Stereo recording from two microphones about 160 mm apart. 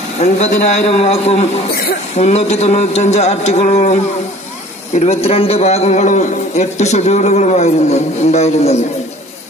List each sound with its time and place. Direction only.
0.2 s a man's voice: 45° left (ahead or behind)